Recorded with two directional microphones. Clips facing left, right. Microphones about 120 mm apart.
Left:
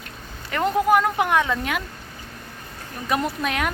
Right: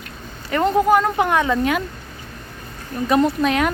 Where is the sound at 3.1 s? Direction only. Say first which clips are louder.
Right 7 dB; 5° left (ahead or behind).